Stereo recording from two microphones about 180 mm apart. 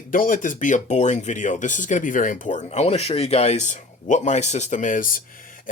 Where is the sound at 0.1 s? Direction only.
50° left (ahead or behind).